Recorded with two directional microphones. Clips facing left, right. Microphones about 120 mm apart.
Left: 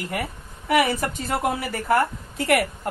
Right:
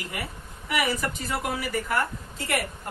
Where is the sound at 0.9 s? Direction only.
50° left (ahead or behind).